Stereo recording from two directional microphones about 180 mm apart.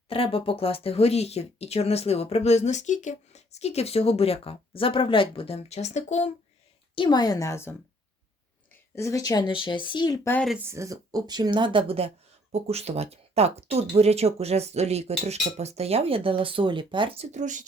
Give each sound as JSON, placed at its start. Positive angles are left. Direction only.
{"t": 0.1, "sound": "speech", "side_deg": 30}
{"t": 6.9, "sound": "speech", "side_deg": 25}
{"t": 9.0, "sound": "speech", "side_deg": 15}
{"t": 10.2, "sound": "speech", "side_deg": 10}
{"t": 10.7, "sound": "speech", "side_deg": -15}
{"t": 17.3, "sound": "speech", "side_deg": -45}